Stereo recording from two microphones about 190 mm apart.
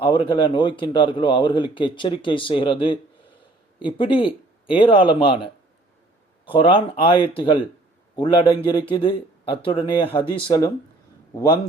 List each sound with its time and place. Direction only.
0.0 s a man's voice: 25° left (ahead or behind)